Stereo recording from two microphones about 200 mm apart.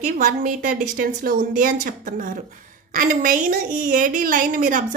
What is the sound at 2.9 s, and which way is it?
Speech, 45° right (ahead or behind).